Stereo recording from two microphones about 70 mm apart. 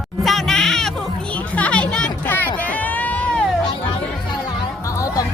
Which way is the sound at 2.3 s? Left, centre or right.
Left.